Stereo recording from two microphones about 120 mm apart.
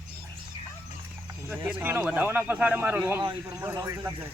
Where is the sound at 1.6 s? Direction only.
15° right (ahead or behind).